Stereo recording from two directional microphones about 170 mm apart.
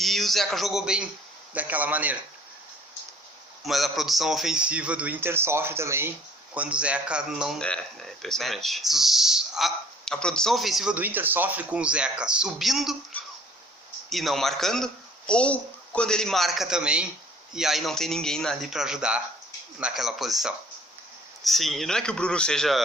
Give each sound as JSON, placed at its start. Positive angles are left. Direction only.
{"t": 0.0, "sound": "speech", "side_deg": 0}
{"t": 3.6, "sound": "speech", "side_deg": 0}
{"t": 14.1, "sound": "speech", "side_deg": 0}